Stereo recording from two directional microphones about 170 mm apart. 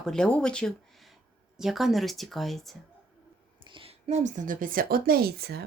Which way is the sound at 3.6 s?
30° right (ahead or behind).